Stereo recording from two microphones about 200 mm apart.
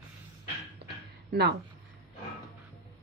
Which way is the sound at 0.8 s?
55° right (ahead or behind).